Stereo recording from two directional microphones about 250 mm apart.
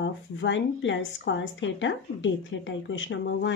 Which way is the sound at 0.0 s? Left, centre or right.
Left.